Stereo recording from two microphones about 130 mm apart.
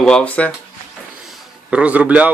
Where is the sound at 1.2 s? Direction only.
10° right (ahead or behind).